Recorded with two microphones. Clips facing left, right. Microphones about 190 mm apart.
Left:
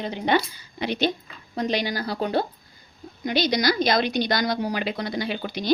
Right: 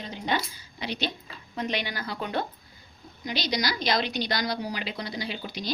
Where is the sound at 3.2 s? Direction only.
55° left (ahead or behind).